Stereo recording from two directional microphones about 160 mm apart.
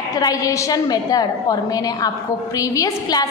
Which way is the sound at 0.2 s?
20° left (ahead or behind).